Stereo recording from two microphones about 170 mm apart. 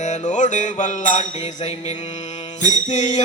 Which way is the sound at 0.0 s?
45° left (ahead or behind).